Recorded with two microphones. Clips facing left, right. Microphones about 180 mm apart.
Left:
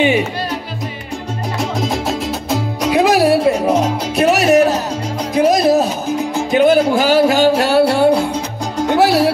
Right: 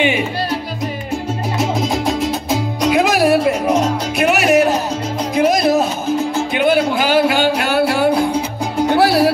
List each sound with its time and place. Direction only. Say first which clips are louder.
1.6 s music: right 1 dB; centre (ahead or behind)
2.9 s music: left 2 dB; 35° left (ahead or behind)
7.5 s music: left 3 dB; 30° left (ahead or behind)
8.3 s music: right 2 dB; 10° right (ahead or behind)
8.9 s music: left 1 dB; 20° left (ahead or behind)